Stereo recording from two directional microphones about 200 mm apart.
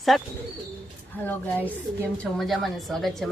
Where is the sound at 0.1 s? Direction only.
Centre (ahead or behind).